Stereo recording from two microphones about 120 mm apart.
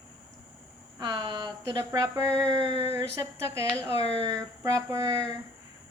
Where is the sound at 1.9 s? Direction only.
25° right (ahead or behind).